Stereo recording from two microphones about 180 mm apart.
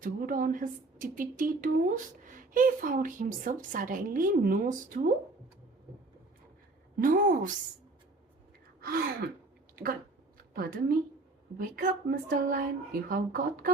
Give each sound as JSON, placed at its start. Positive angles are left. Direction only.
{"t": 0.0, "sound": "a woman's voice", "side_deg": -50}
{"t": 7.0, "sound": "a woman's voice", "side_deg": -50}
{"t": 8.8, "sound": "gasp", "side_deg": -55}
{"t": 10.3, "sound": "a sound", "side_deg": -55}
{"t": 11.5, "sound": "a woman's voice", "side_deg": -55}